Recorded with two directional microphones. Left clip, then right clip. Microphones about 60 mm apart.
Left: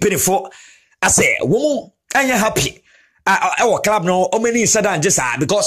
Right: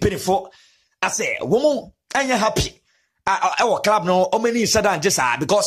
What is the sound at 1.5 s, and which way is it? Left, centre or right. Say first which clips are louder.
Speech: left 1 dB; right.